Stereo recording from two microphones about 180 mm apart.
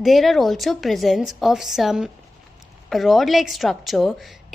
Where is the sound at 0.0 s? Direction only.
Centre (ahead or behind).